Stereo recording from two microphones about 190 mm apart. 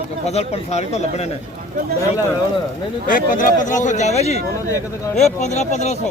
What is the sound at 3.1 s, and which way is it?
Speech, 45° left (ahead or behind).